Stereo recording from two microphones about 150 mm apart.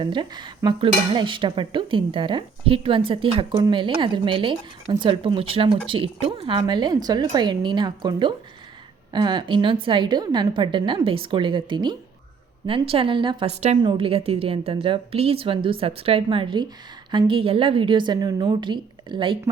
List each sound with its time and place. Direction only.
0.0 s cutlery: 30° right (ahead or behind)